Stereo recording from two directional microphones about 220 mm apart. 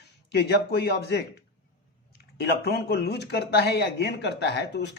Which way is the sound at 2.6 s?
45° left (ahead or behind).